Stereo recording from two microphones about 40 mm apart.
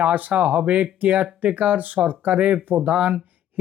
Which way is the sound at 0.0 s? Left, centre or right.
Right.